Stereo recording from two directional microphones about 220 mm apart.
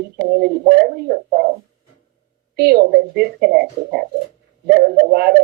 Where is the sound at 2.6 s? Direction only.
45° right (ahead or behind).